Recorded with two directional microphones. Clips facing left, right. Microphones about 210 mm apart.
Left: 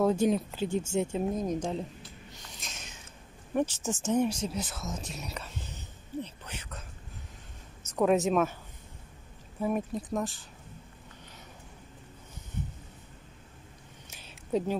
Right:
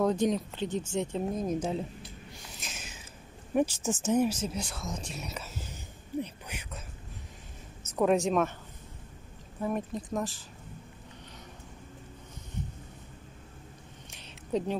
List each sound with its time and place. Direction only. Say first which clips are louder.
0.0 s speech: left 1 dB; 5° left (ahead or behind)
2.6 s a sound: right 2 dB; 5° right (ahead or behind)
3.5 s speech: right 2 dB; 10° right (ahead or behind)
7.9 s speech: left 1 dB; centre (ahead or behind)
9.6 s speech: left 2 dB; 5° left (ahead or behind)
14.1 s a sound: left 1 dB; 5° left (ahead or behind)